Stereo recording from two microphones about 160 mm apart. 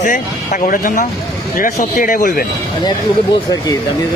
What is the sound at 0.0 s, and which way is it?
Speech, 55° left (ahead or behind).